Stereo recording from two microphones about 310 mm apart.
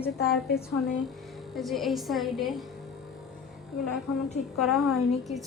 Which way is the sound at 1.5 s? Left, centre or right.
Centre.